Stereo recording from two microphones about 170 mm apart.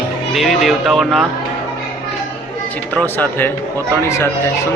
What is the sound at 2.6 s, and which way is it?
Speech, 10° left (ahead or behind).